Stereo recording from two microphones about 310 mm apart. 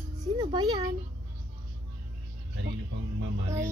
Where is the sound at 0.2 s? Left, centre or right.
Centre.